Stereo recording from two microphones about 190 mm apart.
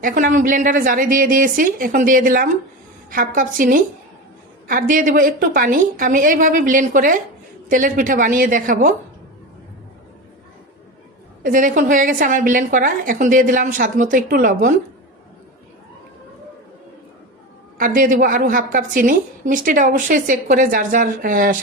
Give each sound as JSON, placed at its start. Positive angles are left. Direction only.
{"t": 0.0, "sound": "a woman's voice", "side_deg": -45}
{"t": 11.4, "sound": "a woman's voice", "side_deg": -45}
{"t": 17.7, "sound": "a woman's voice", "side_deg": -45}